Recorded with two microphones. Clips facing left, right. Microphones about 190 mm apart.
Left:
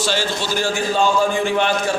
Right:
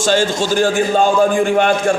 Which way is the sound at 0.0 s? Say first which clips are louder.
Right 6 dB; 50° right (ahead or behind).